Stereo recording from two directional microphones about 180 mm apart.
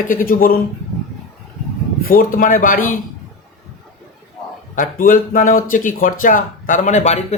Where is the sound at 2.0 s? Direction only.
50° left (ahead or behind).